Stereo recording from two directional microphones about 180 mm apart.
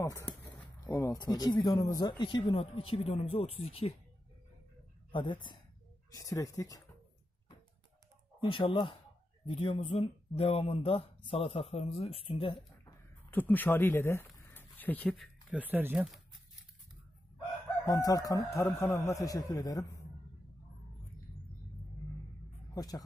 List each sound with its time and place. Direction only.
0.0 s speech: 15° left (ahead or behind); by 3.9 s 35° left (ahead or behind)
5.1 s speech: 25° left (ahead or behind)
8.4 s speech: 30° left (ahead or behind)
13.3 s speech: 10° left (ahead or behind)
15.5 s speech: 10° right (ahead or behind)
17.8 s speech: 20° left (ahead or behind)
22.8 s speech: 20° left (ahead or behind)